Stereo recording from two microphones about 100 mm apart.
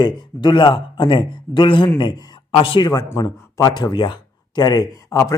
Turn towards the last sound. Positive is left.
turn(degrees=35)  # may be behind; listen again after turning